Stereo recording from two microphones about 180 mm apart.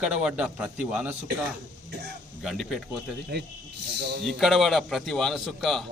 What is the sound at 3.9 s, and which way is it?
Speech, 70° right (ahead or behind).